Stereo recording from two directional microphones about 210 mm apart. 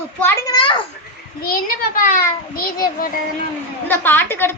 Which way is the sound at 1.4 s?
45° left (ahead or behind).